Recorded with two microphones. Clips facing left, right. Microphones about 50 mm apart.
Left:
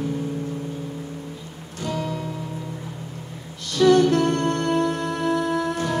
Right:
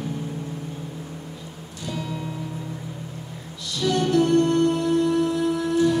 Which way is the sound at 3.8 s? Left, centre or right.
Left.